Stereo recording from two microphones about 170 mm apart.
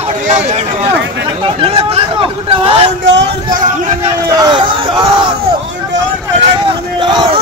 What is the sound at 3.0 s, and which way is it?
Speech, 90° right.